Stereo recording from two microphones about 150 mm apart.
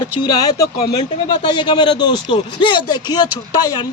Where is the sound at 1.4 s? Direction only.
30° left (ahead or behind).